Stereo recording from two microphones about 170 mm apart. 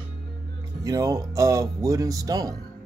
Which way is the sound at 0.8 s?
20° right (ahead or behind).